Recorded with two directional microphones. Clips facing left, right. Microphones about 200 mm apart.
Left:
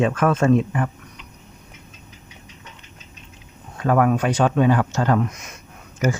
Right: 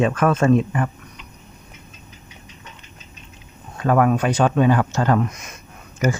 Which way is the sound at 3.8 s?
35° right (ahead or behind).